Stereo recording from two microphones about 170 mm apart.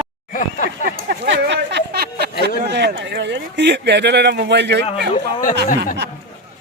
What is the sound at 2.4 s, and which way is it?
Speech, 80° right.